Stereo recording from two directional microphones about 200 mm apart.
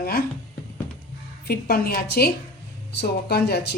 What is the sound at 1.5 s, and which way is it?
Speech, 50° left (ahead or behind).